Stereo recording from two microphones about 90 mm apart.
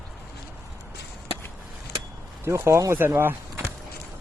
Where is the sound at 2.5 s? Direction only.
30° right (ahead or behind).